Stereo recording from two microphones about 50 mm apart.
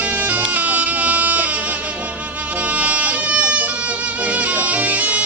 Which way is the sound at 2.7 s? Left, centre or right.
Right.